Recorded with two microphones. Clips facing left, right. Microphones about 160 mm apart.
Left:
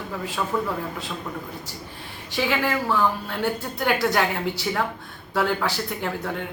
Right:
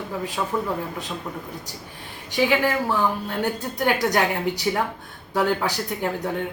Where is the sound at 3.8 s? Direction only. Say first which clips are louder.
Right 1 dB; 15° right (ahead or behind).